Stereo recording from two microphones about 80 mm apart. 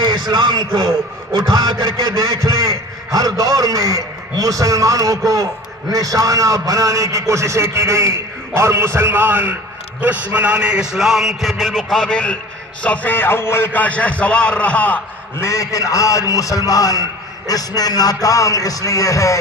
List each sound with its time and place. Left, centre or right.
0.0 s a man's voice: right; by 12.4 s centre
12.8 s music: left
13.7 s a man's voice: centre
15.4 s a man's voice: left